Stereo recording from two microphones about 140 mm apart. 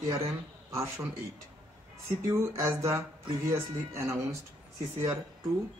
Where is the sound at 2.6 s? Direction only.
20° right (ahead or behind).